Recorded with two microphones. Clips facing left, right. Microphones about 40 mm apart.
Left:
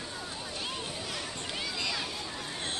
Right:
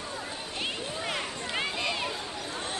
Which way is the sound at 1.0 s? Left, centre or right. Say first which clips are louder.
Right 4 dB; right.